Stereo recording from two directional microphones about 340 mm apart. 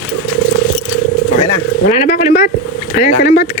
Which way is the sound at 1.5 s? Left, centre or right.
Left.